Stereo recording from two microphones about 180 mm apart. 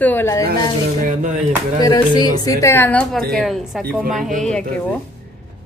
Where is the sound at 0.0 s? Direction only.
10° left (ahead or behind).